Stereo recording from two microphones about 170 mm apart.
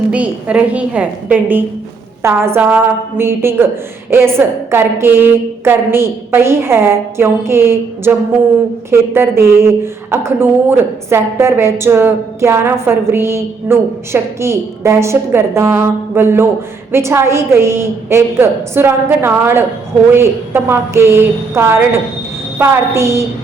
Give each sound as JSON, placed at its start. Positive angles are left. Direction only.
{"t": 0.1, "sound": "a woman's voice", "side_deg": -5}